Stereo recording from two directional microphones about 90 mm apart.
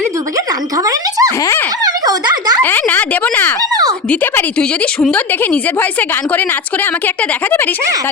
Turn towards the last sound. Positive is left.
turn(degrees=20)  # may be behind; listen again after turning